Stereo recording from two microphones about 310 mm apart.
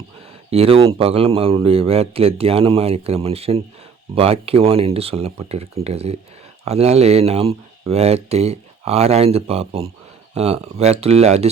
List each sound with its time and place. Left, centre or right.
0.5 s speech: centre